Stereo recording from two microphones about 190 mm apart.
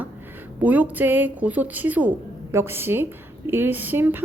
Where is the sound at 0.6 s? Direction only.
10° right (ahead or behind).